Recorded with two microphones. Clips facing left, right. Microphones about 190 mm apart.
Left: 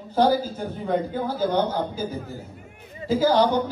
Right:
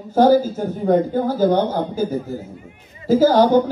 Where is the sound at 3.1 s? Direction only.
45° right (ahead or behind).